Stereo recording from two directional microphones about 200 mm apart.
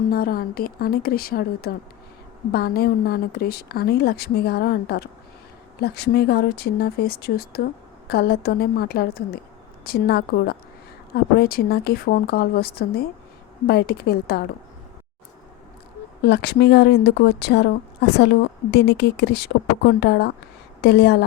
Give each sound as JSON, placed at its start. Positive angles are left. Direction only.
{"t": 0.1, "sound": "speech", "side_deg": 50}
{"t": 16.2, "sound": "a woman's voice", "side_deg": 55}